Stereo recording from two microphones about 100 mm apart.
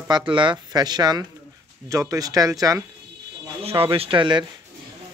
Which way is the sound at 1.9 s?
30° right (ahead or behind).